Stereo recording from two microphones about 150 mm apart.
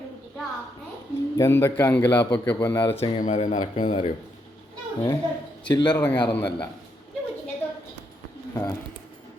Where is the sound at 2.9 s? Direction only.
35° left (ahead or behind).